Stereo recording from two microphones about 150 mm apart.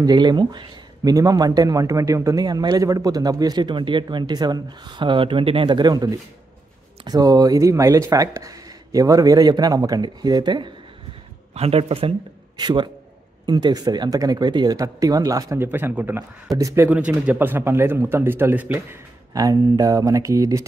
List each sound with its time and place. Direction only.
0.0 s speech: 25° right (ahead or behind)
11.5 s speech: 40° right (ahead or behind); by 16.3 s 10° right (ahead or behind)
16.4 s speech: 20° right (ahead or behind)